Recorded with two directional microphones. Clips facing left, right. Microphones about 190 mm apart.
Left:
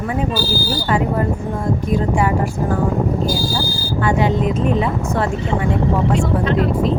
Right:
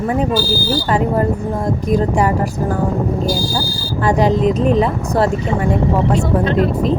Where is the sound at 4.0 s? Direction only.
40° right (ahead or behind).